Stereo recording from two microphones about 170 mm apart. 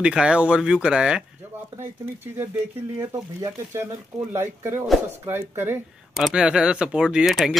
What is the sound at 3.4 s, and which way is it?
A man's voice, 15° right (ahead or behind).